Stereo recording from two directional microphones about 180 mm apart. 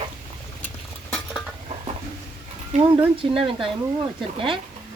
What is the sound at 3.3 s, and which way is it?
Speech, 30° right (ahead or behind).